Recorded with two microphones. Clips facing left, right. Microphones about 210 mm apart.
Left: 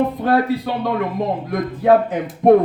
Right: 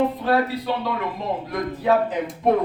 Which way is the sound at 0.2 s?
50° left (ahead or behind).